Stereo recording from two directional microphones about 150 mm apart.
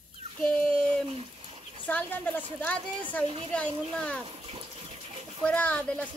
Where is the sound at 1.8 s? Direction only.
10° left (ahead or behind).